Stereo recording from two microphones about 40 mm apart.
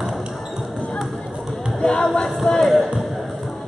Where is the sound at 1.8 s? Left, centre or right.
Centre.